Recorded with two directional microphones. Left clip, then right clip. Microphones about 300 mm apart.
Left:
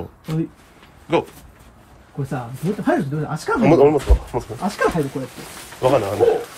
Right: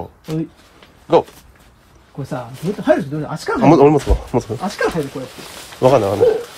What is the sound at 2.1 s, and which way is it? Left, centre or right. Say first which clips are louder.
Speech: even; centre.